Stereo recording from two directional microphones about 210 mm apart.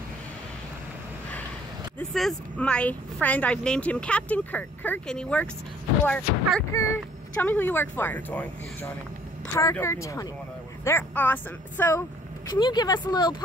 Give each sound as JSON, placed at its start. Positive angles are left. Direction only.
{"t": 2.0, "sound": "a woman's voice", "side_deg": 5}
{"t": 12.4, "sound": "speech", "side_deg": 20}